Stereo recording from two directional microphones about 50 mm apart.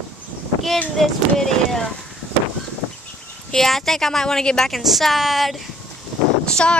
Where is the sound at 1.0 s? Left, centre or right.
Centre.